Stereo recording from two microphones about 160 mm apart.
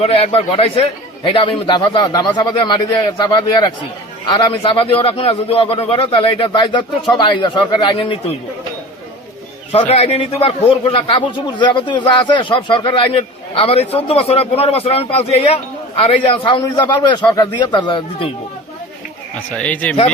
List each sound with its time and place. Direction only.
0.0 s a man's voice: 35° left (ahead or behind)
9.8 s a man's voice: 40° left (ahead or behind)
19.5 s speech: 10° left (ahead or behind)